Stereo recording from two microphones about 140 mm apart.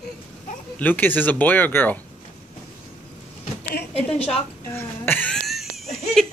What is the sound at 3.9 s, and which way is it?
Speech, 45° left (ahead or behind).